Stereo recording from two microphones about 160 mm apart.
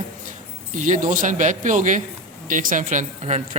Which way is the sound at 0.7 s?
50° right (ahead or behind).